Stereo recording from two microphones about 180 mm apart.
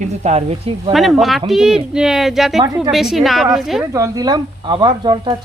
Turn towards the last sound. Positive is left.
turn(degrees=-25)  # may be behind; listen again after turning